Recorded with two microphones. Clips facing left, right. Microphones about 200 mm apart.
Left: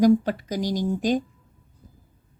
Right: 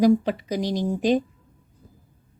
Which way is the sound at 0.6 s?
25° right (ahead or behind).